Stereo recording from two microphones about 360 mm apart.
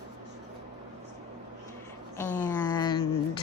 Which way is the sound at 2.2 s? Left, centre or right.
Centre.